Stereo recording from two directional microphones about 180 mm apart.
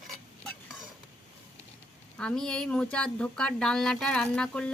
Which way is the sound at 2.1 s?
5° left (ahead or behind).